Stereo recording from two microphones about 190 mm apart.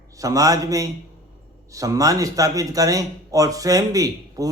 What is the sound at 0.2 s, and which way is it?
A man's voice, 20° right (ahead or behind).